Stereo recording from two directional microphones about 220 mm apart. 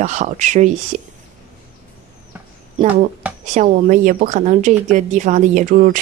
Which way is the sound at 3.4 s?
35° right (ahead or behind).